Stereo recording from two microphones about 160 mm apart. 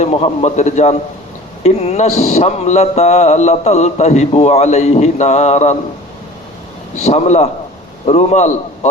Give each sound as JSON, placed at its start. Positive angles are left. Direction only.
{"t": 0.0, "sound": "mantra", "side_deg": 40}
{"t": 7.0, "sound": "mantra", "side_deg": 45}
{"t": 8.0, "sound": "a man's voice", "side_deg": 40}